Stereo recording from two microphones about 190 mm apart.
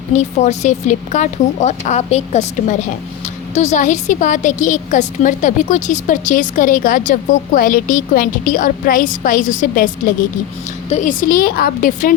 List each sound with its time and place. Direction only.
0.1 s a woman's voice: 40° left (ahead or behind)